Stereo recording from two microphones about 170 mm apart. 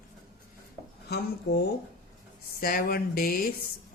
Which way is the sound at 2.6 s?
55° left (ahead or behind).